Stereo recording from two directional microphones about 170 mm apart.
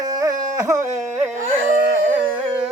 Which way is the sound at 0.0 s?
20° right (ahead or behind).